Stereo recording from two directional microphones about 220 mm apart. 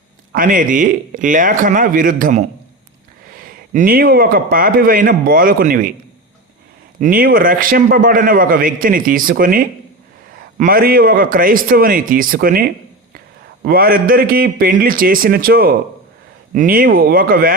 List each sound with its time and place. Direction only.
0.3 s a man's voice: 40° right (ahead or behind)
7.0 s a man's voice: 40° right (ahead or behind)
13.7 s a man's voice: 40° right (ahead or behind)